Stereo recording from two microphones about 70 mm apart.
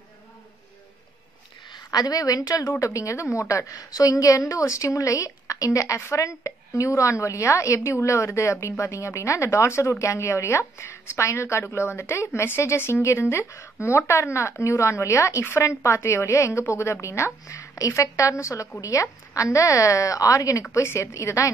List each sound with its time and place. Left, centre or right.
1.7 s a woman's voice: left
5.9 s a woman's voice: left
6.2 s a woman's voice: left